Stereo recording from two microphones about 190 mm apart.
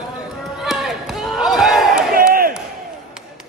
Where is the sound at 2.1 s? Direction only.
50° right (ahead or behind).